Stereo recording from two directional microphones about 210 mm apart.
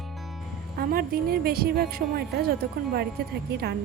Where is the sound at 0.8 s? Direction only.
45° right (ahead or behind).